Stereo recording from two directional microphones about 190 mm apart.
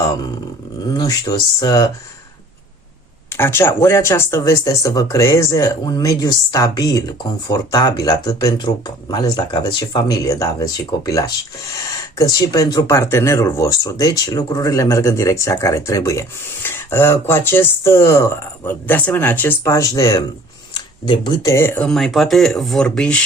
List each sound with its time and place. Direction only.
0.9 s speech: 20° left (ahead or behind)
3.3 s speech: 10° left (ahead or behind)